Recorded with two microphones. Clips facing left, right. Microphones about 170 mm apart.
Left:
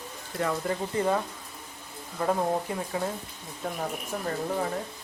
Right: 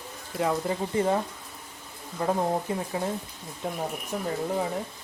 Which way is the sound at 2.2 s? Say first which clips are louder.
Even; 30° right (ahead or behind).